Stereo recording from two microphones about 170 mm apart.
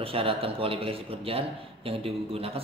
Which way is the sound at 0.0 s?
35° right (ahead or behind).